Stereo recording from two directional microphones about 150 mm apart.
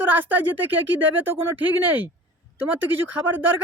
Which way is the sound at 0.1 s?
15° right (ahead or behind).